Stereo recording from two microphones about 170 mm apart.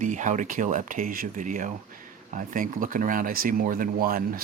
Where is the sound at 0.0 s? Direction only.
50° right (ahead or behind).